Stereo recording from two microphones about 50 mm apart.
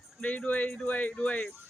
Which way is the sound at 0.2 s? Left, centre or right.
Left.